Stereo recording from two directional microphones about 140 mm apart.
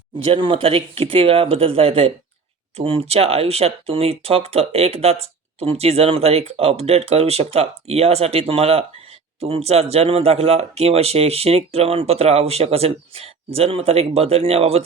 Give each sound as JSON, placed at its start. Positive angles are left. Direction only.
{"t": 0.2, "sound": "speech", "side_deg": -40}